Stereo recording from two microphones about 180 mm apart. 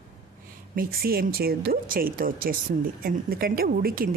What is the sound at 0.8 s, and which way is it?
Speech, 55° right (ahead or behind).